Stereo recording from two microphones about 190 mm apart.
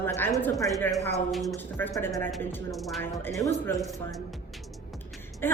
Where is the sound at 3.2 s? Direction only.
15° left (ahead or behind).